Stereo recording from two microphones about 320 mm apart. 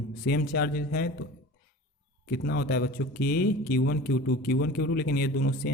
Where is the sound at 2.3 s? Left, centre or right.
Left.